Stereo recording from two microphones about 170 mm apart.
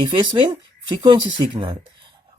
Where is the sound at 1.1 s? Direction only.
30° right (ahead or behind).